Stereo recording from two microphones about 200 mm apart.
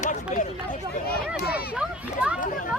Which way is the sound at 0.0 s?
40° left (ahead or behind).